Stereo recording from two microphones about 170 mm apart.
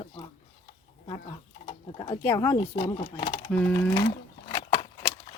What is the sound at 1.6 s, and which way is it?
Bird, 30° left (ahead or behind).